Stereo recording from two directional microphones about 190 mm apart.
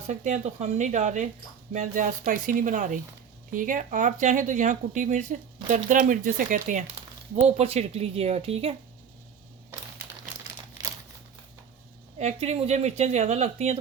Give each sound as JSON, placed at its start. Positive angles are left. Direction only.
{"t": 0.1, "sound": "speech", "side_deg": -35}
{"t": 10.8, "sound": "crumpling", "side_deg": -20}
{"t": 12.2, "sound": "speech", "side_deg": -35}